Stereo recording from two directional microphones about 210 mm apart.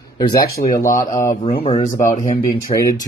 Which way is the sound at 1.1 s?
15° left (ahead or behind).